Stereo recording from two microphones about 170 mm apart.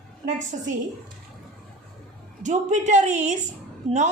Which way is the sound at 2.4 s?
45° right (ahead or behind).